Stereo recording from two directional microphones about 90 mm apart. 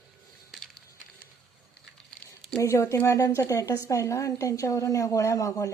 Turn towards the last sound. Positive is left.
turn(degrees=35)  # may be behind; listen again after turning